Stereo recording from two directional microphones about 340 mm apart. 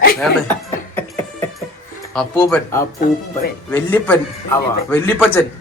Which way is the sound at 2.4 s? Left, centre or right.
Centre.